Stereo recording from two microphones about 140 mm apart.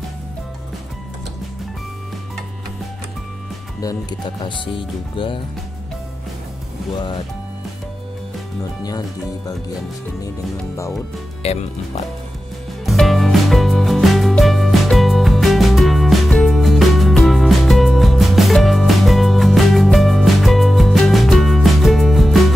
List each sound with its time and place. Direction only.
4.5 s speech: 35° left (ahead or behind)
11.4 s speech: 50° left (ahead or behind)
12.8 s music: centre (ahead or behind)